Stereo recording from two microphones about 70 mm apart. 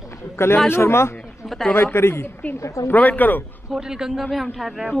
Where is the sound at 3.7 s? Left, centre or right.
Centre.